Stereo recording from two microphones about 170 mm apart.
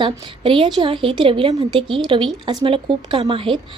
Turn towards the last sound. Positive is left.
turn(degrees=-30)  # may be behind; listen again after turning